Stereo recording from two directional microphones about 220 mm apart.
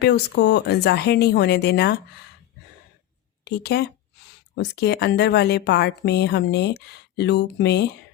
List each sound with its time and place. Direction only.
0.0 s a woman's voice: 50° left (ahead or behind)
3.4 s a woman's voice: 50° left (ahead or behind)